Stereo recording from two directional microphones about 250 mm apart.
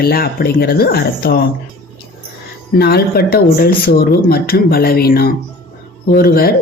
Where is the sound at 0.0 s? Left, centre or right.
Left.